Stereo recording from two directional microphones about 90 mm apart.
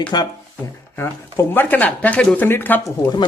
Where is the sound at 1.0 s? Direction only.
25° left (ahead or behind).